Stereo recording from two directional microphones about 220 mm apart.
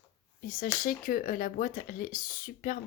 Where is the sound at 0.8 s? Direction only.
40° left (ahead or behind).